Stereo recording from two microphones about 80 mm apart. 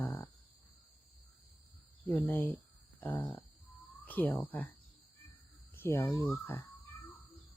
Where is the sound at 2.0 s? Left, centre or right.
Left.